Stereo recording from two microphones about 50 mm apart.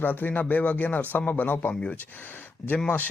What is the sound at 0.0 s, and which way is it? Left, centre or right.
A man's voice, left.